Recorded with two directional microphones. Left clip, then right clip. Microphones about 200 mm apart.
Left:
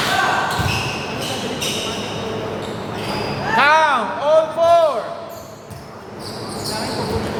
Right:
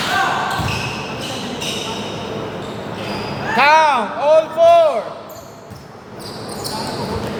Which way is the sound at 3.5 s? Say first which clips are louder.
Right 2 dB; 30° right (ahead or behind).